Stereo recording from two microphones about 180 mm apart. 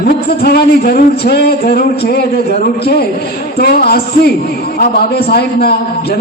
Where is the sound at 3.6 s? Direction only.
60° left (ahead or behind).